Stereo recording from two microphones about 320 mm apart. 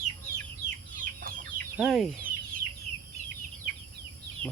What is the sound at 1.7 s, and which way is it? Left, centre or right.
Speech, centre.